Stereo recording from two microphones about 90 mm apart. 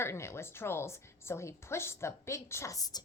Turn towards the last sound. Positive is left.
turn(degrees=40)  # may be behind; listen again after turning